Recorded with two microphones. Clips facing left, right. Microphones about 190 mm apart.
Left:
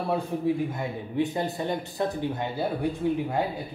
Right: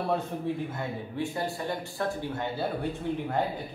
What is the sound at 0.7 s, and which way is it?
Speech, 15° left (ahead or behind).